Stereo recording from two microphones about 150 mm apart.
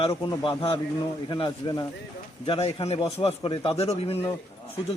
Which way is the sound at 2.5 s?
40° left (ahead or behind).